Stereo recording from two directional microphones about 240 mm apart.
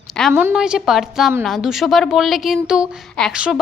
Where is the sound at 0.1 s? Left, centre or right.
Centre.